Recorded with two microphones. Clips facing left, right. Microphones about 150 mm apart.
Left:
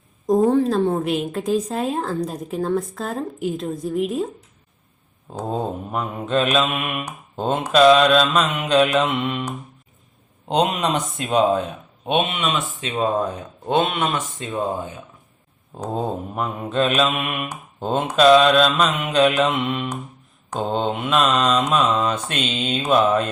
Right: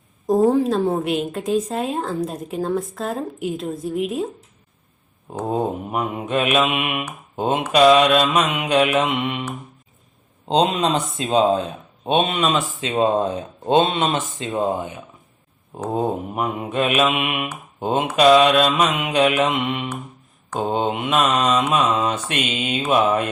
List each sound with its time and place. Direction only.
0.3 s a woman's voice: 5° right (ahead or behind)
5.5 s mantra: 15° right (ahead or behind)
7.3 s speech: 10° right (ahead or behind)
7.7 s mantra: 10° right (ahead or behind)
10.5 s speech: 30° right (ahead or behind)
15.9 s mantra: 15° right (ahead or behind)
17.7 s speech: 15° right (ahead or behind)
18.2 s mantra: 10° right (ahead or behind)